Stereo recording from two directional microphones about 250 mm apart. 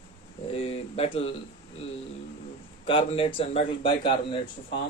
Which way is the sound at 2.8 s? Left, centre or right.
Left.